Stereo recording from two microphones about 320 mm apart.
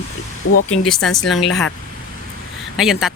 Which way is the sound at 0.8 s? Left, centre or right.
Centre.